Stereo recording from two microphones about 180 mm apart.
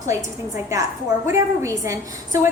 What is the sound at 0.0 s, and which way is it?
A woman's voice, 15° right (ahead or behind).